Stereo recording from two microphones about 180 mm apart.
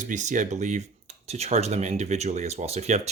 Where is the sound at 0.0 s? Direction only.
45° right (ahead or behind).